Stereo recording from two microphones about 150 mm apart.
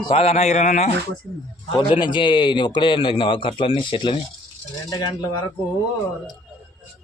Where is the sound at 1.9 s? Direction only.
30° left (ahead or behind).